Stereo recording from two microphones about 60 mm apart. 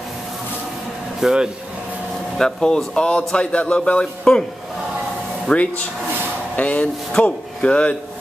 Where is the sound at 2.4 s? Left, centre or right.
Centre.